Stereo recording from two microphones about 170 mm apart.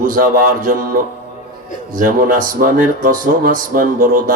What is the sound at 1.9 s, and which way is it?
Speech, 55° right (ahead or behind).